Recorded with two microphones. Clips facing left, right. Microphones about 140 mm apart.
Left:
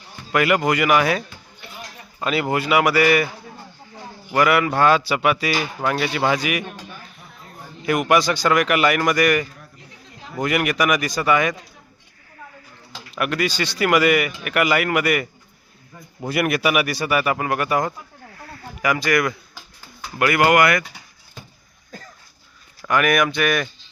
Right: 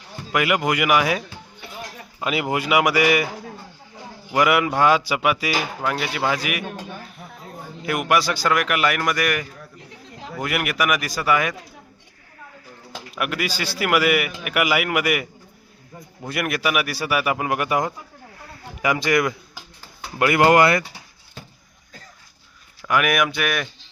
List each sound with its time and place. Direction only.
0.3 s speech: 10° right (ahead or behind)
2.2 s speech: 15° right (ahead or behind)
4.3 s speech: 15° right (ahead or behind)
13.1 s speech: 5° right (ahead or behind)
16.2 s speech: centre (ahead or behind); by 20.8 s 30° right (ahead or behind)
22.9 s speech: 10° right (ahead or behind)